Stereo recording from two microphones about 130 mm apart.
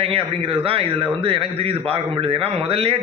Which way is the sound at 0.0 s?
50° right (ahead or behind).